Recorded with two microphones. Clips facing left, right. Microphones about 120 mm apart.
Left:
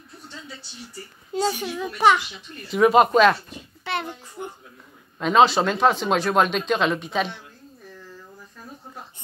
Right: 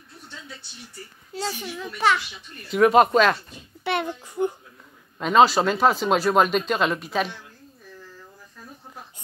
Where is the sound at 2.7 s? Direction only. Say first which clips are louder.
Even; centre (ahead or behind).